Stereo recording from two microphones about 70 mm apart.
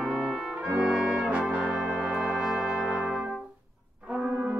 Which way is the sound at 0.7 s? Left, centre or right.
Centre.